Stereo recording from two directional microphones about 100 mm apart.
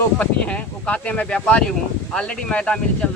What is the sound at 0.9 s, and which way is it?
Speech, 10° left (ahead or behind).